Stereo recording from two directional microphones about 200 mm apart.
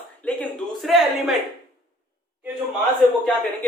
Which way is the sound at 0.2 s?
5° left (ahead or behind).